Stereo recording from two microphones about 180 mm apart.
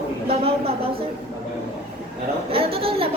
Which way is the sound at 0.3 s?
30° right (ahead or behind).